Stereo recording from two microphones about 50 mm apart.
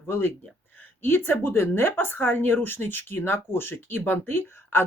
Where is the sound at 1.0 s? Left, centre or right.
Left.